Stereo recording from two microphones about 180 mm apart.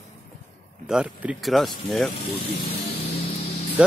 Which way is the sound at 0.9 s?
5° right (ahead or behind).